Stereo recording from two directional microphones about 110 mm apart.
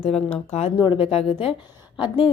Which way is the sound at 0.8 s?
50° left (ahead or behind).